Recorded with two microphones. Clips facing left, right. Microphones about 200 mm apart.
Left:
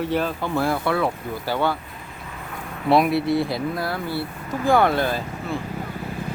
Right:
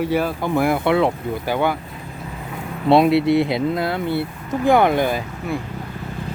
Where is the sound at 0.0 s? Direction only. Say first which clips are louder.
Right 3 dB; 10° right (ahead or behind).